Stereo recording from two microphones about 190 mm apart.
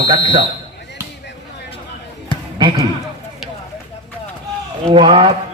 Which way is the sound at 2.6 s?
30° right (ahead or behind).